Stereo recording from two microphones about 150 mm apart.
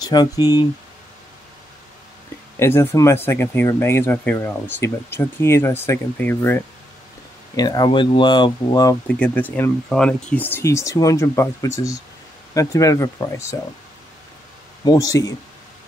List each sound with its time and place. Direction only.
0.0 s speech: 25° left (ahead or behind)
2.6 s speech: 15° left (ahead or behind)
7.5 s speech: 25° left (ahead or behind)
9.0 s speech: 10° left (ahead or behind)
14.9 s speech: 25° left (ahead or behind)